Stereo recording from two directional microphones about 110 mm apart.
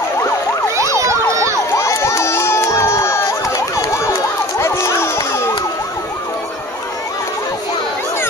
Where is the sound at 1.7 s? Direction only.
25° left (ahead or behind).